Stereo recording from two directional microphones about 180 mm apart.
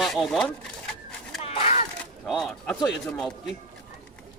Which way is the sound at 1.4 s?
35° left (ahead or behind).